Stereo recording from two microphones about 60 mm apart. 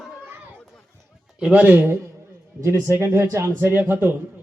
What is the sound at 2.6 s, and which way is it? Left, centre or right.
Speech, right.